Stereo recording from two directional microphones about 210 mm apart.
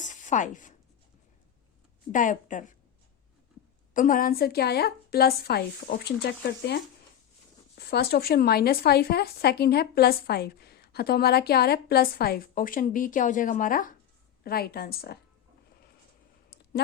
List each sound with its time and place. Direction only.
0.0 s a sound: 35° left (ahead or behind)
2.1 s a woman's voice: 40° left (ahead or behind)
3.9 s speech: 40° left (ahead or behind)